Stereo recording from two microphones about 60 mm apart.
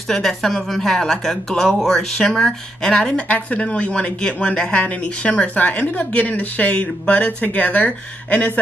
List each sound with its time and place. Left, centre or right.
0.1 s a woman's voice: centre; by 8.5 s left